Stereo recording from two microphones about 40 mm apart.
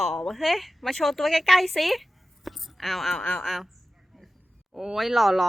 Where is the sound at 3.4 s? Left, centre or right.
Centre.